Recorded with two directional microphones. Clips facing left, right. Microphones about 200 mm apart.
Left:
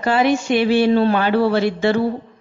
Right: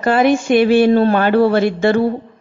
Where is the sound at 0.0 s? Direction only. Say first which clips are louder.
Right 3 dB; 50° right (ahead or behind).